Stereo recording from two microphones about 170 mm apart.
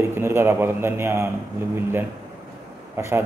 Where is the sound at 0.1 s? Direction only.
15° right (ahead or behind).